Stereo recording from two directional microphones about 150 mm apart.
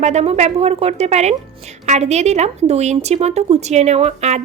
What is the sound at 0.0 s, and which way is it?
A woman's voice, 45° right (ahead or behind).